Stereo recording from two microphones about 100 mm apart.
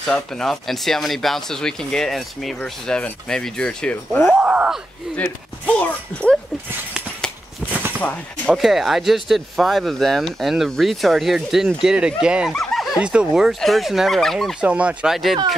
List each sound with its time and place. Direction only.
0.0 s speech: 5° left (ahead or behind)
4.3 s groan: 15° right (ahead or behind)
5.1 s speech: 10° left (ahead or behind)
7.7 s a sound: 20° right (ahead or behind)
8.0 s speech: 15° left (ahead or behind)
8.5 s speech: centre (ahead or behind)
12.5 s snicker: centre (ahead or behind)
13.0 s speech: 10° right (ahead or behind)
14.6 s speech: 15° right (ahead or behind)